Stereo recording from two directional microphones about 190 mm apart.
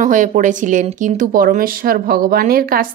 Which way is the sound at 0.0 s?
40° right (ahead or behind).